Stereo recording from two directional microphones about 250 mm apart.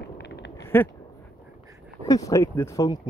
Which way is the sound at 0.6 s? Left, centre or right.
Centre.